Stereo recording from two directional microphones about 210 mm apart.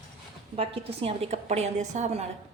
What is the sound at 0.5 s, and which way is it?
A woman's voice, 30° right (ahead or behind).